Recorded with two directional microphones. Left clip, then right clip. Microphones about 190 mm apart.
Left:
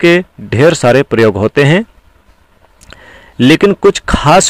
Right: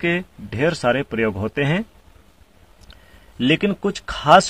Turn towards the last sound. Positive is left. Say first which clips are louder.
# left 5 dB
turn(degrees=45)  # may be behind; listen again after turning